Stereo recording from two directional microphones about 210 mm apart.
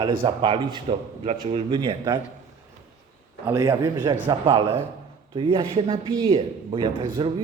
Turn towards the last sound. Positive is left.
turn(degrees=-20)  # may be behind; listen again after turning